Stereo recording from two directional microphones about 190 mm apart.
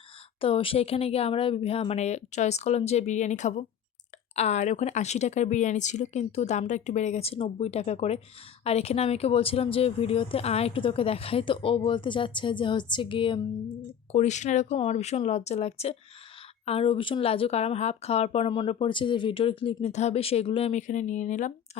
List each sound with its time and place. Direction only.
0.4 s speech: 30° left (ahead or behind)
14.1 s speech: 35° left (ahead or behind)